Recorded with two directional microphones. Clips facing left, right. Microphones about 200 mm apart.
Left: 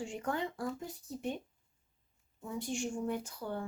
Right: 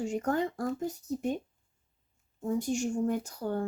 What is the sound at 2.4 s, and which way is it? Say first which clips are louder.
Speech: right 7 dB; 45° right (ahead or behind).